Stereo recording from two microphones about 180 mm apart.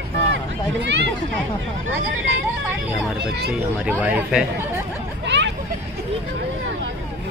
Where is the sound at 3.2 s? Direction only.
65° right (ahead or behind).